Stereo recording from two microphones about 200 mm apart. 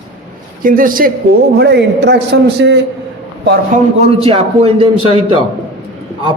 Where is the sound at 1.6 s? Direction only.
60° right (ahead or behind).